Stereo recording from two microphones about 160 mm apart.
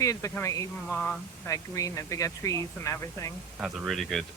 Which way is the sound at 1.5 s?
20° left (ahead or behind).